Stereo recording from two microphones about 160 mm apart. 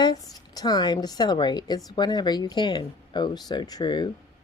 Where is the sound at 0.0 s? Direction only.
25° left (ahead or behind).